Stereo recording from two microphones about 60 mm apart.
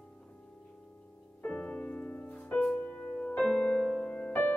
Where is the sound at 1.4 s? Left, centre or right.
Centre.